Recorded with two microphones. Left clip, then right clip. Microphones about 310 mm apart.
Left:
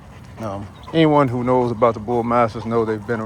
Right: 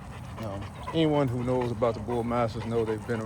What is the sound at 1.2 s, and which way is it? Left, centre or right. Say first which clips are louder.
Speech: left 11 dB; centre.